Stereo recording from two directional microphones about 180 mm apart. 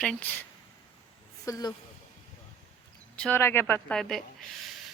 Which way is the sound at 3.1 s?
10° left (ahead or behind).